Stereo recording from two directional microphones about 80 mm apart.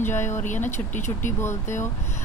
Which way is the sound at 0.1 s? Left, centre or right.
Left.